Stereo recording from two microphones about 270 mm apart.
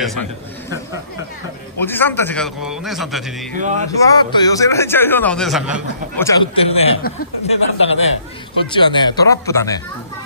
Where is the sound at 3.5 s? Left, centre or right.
Right.